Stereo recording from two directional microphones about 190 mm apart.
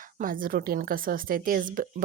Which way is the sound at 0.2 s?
45° right (ahead or behind).